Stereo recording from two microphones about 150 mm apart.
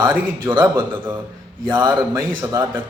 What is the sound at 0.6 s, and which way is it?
Speech, 15° right (ahead or behind).